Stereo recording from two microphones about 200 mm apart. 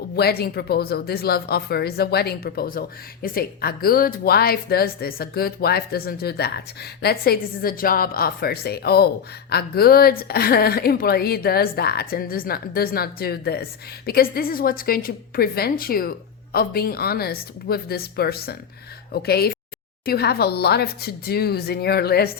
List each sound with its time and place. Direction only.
0.2 s a woman's voice: 50° left (ahead or behind)